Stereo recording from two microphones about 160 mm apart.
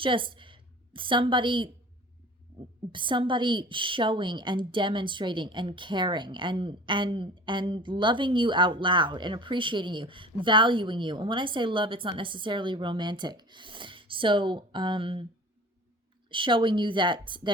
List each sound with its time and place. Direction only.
0.0 s a woman's voice: 30° right (ahead or behind)
2.9 s a woman's voice: 30° right (ahead or behind)
16.3 s speech: 30° right (ahead or behind)